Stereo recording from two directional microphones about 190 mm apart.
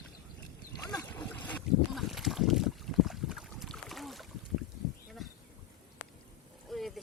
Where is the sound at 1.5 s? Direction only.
5° left (ahead or behind).